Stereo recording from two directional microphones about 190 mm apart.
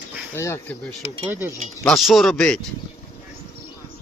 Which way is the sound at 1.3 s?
10° right (ahead or behind).